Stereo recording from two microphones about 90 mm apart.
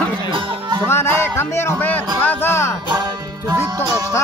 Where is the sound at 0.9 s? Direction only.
30° left (ahead or behind).